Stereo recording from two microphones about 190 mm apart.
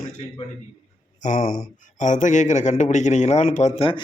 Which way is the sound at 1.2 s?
45° left (ahead or behind).